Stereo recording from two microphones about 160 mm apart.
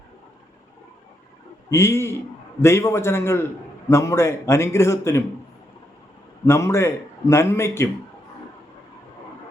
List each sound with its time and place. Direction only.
1.7 s a man's voice: 15° left (ahead or behind)
6.4 s a man's voice: 15° left (ahead or behind)